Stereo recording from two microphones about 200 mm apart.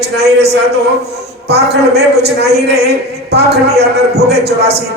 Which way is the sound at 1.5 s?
55° right (ahead or behind).